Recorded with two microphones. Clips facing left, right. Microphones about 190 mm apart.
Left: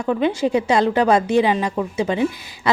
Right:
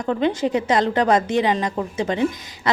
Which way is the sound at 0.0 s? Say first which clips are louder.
Left 1 dB; 10° left (ahead or behind).